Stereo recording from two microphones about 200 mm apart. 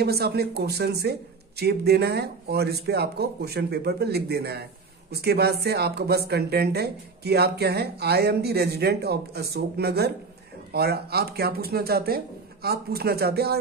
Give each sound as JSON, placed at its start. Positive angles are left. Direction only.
{"t": 0.0, "sound": "speech", "side_deg": -55}